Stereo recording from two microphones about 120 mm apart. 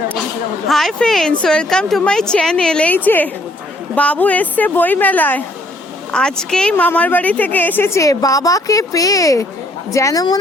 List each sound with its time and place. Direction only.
0.7 s a woman's voice: centre (ahead or behind); by 10.4 s 30° left (ahead or behind)